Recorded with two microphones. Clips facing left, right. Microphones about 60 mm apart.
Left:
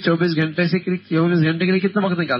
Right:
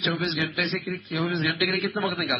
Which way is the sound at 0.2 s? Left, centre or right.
Left.